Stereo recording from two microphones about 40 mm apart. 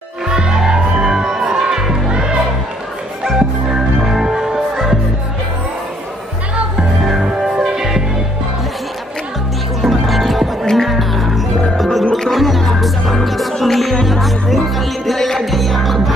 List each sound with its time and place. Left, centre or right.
0.3 s music: centre
3.3 s music: centre
7.1 s music: centre
9.8 s music: centre
15.1 s music: centre
15.5 s music: centre